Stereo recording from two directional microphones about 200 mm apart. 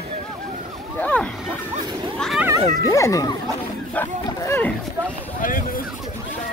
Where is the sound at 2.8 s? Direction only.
15° left (ahead or behind).